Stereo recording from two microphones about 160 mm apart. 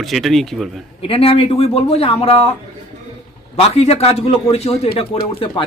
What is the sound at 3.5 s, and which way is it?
Speech, 40° left (ahead or behind).